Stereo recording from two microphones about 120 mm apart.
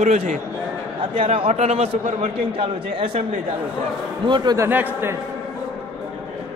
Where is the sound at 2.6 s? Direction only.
50° right (ahead or behind).